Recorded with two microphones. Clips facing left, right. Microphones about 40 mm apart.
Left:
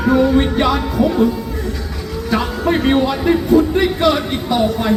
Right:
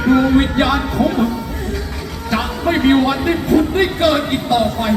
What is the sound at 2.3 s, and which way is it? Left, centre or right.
A man's voice, centre.